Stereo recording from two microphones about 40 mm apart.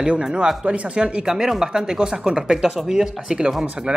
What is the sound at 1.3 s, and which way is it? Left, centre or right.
Speech, centre.